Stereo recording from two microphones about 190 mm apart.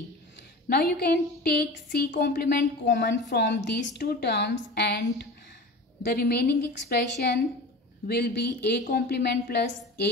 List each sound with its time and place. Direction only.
0.7 s a woman's voice: 55° left (ahead or behind)